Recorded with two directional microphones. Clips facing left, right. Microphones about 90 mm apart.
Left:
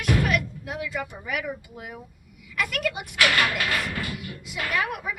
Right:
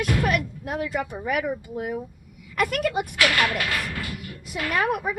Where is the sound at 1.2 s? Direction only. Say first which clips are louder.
Right 5 dB; 40° right (ahead or behind).